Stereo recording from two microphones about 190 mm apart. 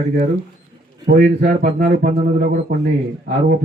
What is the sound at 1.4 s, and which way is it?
A man's voice, 50° right (ahead or behind).